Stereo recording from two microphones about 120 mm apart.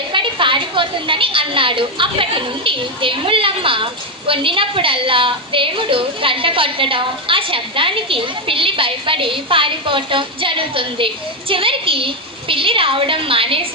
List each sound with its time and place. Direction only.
0.1 s a woman's voice: 45° right (ahead or behind)